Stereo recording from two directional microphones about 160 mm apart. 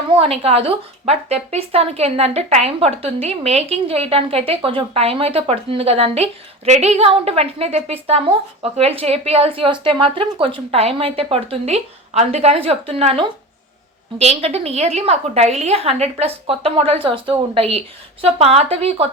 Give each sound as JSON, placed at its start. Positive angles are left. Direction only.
{"t": 0.1, "sound": "a woman's voice", "side_deg": -35}